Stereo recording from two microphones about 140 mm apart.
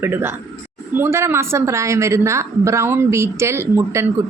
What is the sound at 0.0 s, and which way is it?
A man's voice, 15° right (ahead or behind).